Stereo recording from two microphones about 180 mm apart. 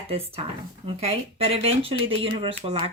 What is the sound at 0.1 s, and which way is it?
Speech, 35° right (ahead or behind).